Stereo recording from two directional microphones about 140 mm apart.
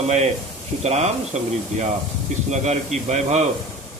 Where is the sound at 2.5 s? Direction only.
55° right (ahead or behind).